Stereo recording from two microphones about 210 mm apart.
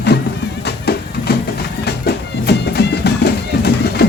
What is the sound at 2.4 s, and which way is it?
Music, 50° left (ahead or behind).